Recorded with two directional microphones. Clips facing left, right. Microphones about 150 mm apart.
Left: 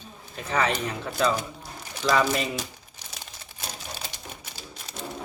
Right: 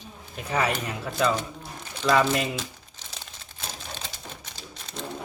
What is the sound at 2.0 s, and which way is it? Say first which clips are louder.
Speech: right 1 dB; 5° left (ahead or behind).